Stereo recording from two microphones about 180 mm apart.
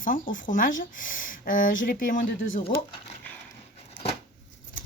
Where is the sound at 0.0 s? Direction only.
50° left (ahead or behind).